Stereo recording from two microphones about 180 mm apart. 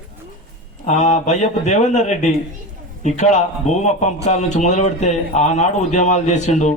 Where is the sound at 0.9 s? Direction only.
40° left (ahead or behind).